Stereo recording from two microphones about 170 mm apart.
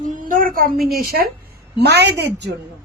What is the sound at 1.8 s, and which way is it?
Speech, 80° right.